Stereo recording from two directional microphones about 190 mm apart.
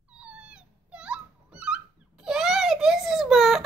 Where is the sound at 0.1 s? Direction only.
5° right (ahead or behind).